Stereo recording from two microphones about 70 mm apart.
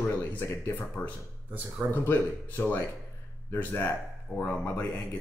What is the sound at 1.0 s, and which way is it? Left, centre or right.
Speech, centre.